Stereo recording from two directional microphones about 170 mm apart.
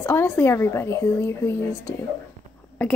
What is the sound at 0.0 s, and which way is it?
A woman's voice, 15° left (ahead or behind).